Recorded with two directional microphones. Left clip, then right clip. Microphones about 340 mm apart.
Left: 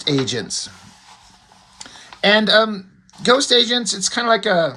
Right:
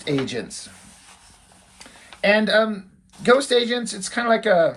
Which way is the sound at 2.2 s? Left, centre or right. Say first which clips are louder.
Left 4 dB; left.